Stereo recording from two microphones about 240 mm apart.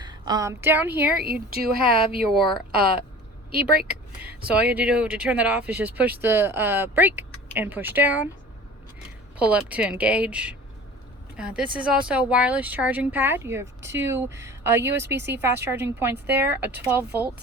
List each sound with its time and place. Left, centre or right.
0.0 s a woman's voice: centre
1.2 s speech: right
3.5 s speech: right
4.2 s speech: centre
9.4 s speech: centre
15.1 s speech: right
15.4 s speech: centre